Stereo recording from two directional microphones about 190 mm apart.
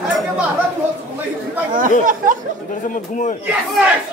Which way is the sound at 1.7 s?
45° right (ahead or behind).